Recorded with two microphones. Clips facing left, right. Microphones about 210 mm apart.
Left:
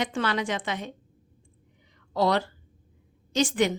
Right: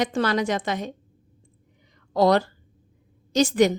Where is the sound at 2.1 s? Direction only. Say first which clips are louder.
Right 5 dB; 45° right (ahead or behind).